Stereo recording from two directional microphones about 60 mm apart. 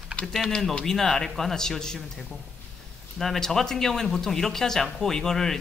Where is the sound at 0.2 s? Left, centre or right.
Centre.